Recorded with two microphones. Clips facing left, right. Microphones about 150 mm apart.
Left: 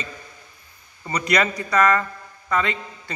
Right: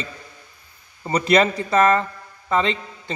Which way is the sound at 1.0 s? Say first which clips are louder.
Right 5 dB; 30° right (ahead or behind).